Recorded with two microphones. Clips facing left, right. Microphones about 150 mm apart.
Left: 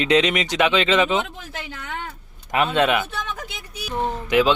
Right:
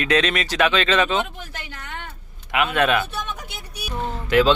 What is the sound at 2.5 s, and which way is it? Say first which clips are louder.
Speech: left 1 dB; 35° left (ahead or behind).